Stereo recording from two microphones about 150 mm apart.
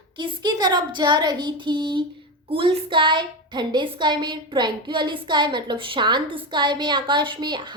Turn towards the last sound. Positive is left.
turn(degrees=-30)  # may be behind; listen again after turning